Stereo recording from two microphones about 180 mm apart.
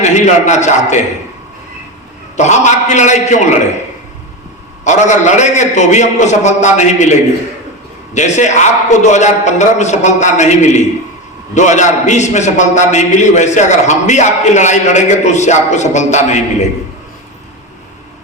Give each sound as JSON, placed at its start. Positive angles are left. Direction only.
{"t": 0.0, "sound": "a man's voice", "side_deg": 40}
{"t": 2.3, "sound": "a man's voice", "side_deg": 40}
{"t": 4.8, "sound": "a man's voice", "side_deg": 40}
{"t": 8.1, "sound": "a man's voice", "side_deg": 40}